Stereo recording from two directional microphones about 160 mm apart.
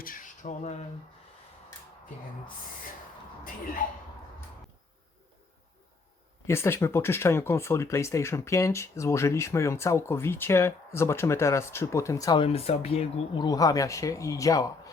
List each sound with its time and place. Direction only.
0.0 s a sound: 60° left (ahead or behind)
6.5 s speech: 15° left (ahead or behind)
12.5 s speech: 40° left (ahead or behind)
13.4 s speech: 25° left (ahead or behind)